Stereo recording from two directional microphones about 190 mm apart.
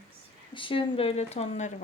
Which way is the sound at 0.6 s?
25° left (ahead or behind).